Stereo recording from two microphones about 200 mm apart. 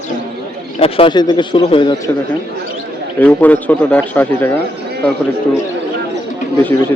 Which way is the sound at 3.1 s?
10° left (ahead or behind).